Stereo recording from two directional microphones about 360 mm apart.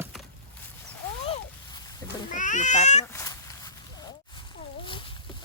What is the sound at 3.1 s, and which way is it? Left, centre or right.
Cat, centre.